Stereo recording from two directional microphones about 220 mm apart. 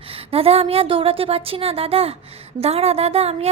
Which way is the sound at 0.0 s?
25° right (ahead or behind).